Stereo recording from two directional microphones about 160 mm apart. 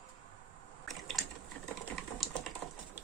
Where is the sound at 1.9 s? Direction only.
Centre (ahead or behind).